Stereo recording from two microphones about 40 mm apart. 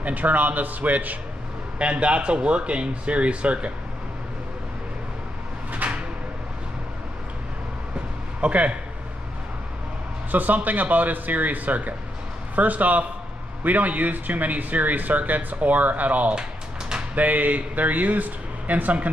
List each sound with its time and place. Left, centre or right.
0.0 s speech: right
1.8 s speech: right
5.7 s a sound: right
8.4 s speech: right
10.3 s speech: right